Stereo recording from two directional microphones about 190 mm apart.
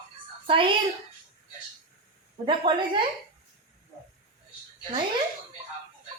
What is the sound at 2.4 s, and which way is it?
Speech, 25° right (ahead or behind).